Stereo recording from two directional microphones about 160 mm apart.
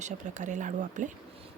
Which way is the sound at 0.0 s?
50° right (ahead or behind).